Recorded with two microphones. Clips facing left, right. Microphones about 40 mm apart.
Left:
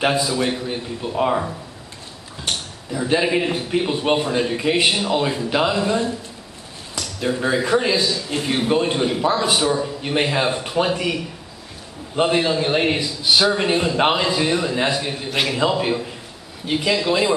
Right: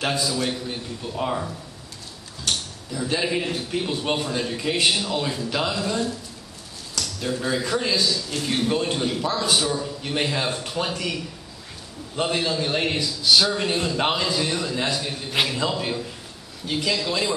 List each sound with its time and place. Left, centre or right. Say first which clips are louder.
0.0 s a man's voice: left 5 dB; left